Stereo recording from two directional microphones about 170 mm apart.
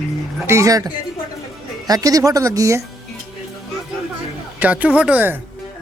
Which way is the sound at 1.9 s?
20° right (ahead or behind).